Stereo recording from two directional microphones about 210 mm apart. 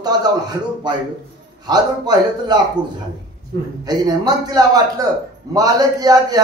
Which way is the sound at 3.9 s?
20° right (ahead or behind).